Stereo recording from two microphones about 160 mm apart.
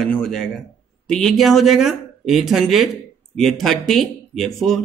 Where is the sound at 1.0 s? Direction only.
Centre (ahead or behind).